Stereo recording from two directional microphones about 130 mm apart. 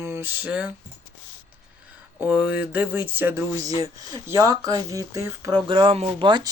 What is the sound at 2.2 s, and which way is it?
Speech, 10° right (ahead or behind).